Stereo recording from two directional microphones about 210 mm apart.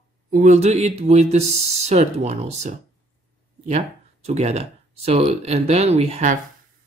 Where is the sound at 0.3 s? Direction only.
35° right (ahead or behind).